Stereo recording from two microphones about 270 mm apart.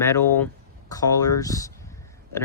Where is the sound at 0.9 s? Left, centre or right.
Centre.